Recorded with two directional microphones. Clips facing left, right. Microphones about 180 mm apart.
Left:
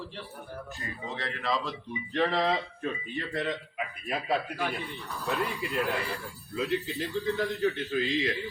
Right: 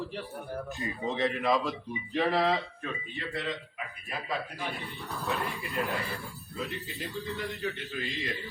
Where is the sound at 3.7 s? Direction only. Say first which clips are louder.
Left 6 dB; 70° left (ahead or behind).